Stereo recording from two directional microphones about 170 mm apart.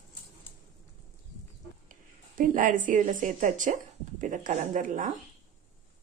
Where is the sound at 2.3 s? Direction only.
50° right (ahead or behind).